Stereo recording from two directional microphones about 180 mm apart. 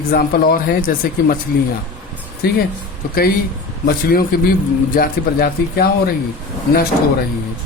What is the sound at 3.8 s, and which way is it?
Speech, 55° left (ahead or behind).